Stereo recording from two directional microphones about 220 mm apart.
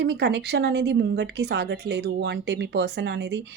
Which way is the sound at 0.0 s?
50° right (ahead or behind).